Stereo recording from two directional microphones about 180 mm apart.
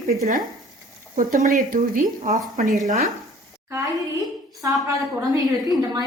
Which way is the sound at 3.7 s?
15° right (ahead or behind).